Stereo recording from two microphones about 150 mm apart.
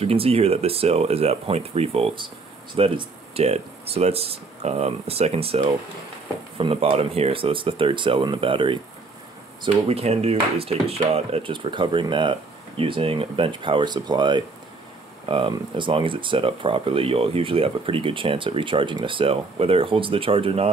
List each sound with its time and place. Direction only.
0.0 s speech: 40° right (ahead or behind)
6.6 s speech: 40° right (ahead or behind)
9.8 s speech: 45° right (ahead or behind)